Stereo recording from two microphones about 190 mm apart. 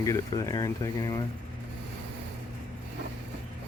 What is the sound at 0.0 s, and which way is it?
Speech, 15° left (ahead or behind).